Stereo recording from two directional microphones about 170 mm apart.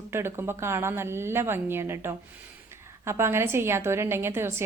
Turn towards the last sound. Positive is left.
turn(degrees=-15)  # may be behind; listen again after turning